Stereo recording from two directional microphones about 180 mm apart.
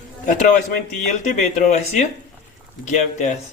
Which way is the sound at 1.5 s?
40° left (ahead or behind).